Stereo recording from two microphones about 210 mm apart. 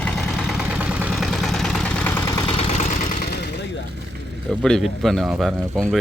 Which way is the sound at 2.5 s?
30° left (ahead or behind).